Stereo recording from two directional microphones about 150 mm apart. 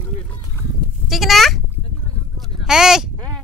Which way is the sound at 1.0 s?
Centre (ahead or behind).